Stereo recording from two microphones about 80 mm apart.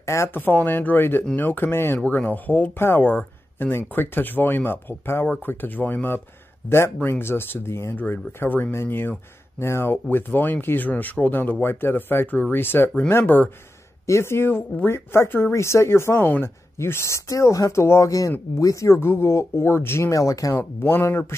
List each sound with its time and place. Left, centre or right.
0.0 s speech: left
14.0 s speech: left
16.2 s speech: left
16.7 s speech: left
20.5 s speech: left